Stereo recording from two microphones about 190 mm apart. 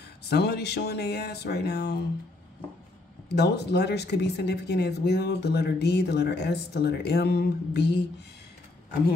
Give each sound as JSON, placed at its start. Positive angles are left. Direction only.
{"t": 0.2, "sound": "speech", "side_deg": 60}
{"t": 3.3, "sound": "speech", "side_deg": 60}